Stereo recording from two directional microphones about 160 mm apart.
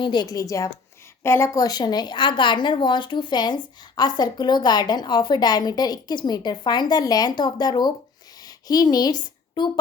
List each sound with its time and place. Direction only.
0.0 s a woman's voice: 30° left (ahead or behind)